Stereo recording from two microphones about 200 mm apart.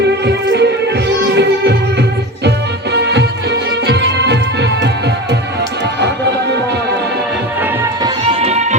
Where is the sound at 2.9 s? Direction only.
55° right (ahead or behind).